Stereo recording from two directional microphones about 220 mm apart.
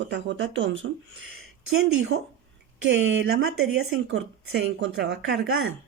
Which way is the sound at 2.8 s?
60° right (ahead or behind).